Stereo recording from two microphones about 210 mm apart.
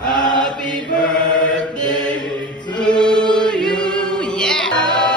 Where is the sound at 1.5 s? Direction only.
5° left (ahead or behind).